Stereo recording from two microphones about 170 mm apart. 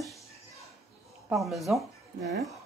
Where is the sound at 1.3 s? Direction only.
Centre (ahead or behind).